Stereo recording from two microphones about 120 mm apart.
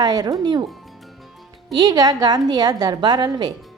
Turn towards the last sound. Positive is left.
turn(degrees=-40)  # may be behind; listen again after turning